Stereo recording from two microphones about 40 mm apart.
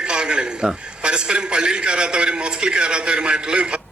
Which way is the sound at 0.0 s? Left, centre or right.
Right.